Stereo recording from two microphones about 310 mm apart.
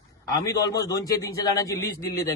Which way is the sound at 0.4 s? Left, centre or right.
Centre.